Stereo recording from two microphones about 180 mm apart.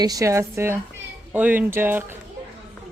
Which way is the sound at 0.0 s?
20° right (ahead or behind).